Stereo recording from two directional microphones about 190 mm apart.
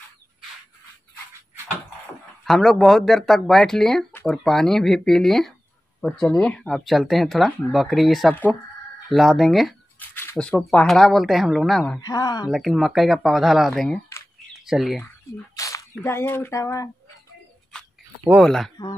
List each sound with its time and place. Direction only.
2.4 s speech: centre (ahead or behind)
12.0 s speech: 20° left (ahead or behind)
12.4 s speech: centre (ahead or behind)
15.5 s a sound: 15° left (ahead or behind)
16.0 s speech: 15° left (ahead or behind)
18.2 s speech: centre (ahead or behind)